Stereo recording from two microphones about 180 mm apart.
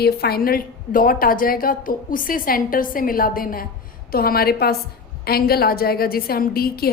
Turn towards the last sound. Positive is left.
turn(degrees=55)  # may be behind; listen again after turning